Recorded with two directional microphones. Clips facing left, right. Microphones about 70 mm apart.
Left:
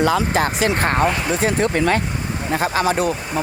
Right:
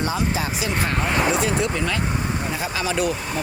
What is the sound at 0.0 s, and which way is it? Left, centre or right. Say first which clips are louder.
Speech: left 6 dB; left.